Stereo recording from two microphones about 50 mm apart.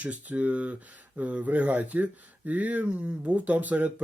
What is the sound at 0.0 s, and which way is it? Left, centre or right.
A man's voice, right.